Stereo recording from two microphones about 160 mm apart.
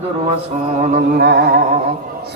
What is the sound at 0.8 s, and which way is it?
Music, 65° right (ahead or behind).